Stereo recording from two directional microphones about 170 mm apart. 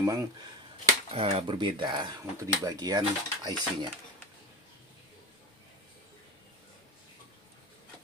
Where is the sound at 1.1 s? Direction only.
35° right (ahead or behind).